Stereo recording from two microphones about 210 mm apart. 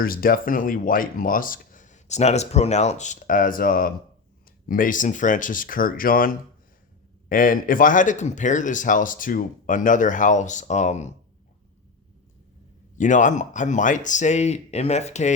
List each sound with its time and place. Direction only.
0.0 s speech: 45° left (ahead or behind)
13.0 s speech: 35° left (ahead or behind)